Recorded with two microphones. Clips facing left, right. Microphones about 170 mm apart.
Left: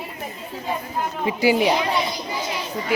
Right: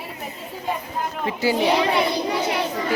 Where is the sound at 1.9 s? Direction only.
65° right (ahead or behind).